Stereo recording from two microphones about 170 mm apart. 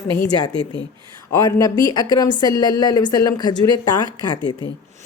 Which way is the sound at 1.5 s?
20° left (ahead or behind).